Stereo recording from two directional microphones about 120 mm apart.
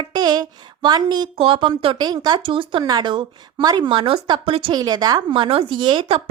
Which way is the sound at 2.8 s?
35° right (ahead or behind).